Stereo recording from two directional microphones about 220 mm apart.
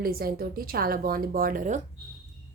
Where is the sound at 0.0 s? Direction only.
45° right (ahead or behind).